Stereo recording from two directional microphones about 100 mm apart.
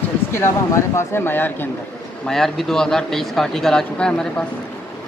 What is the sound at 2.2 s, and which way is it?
Speech, 5° left (ahead or behind).